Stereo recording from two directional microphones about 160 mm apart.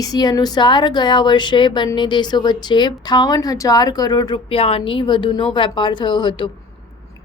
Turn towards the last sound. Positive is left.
turn(degrees=30)  # may be behind; listen again after turning